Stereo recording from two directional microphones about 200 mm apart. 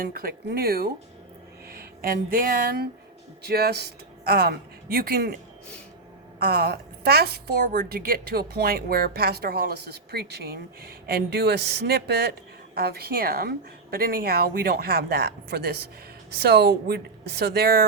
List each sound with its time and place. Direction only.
0.0 s a woman's voice: 45° right (ahead or behind)
6.5 s a woman's voice: 50° right (ahead or behind)